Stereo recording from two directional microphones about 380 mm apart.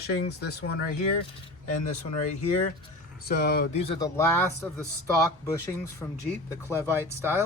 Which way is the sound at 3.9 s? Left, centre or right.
Centre.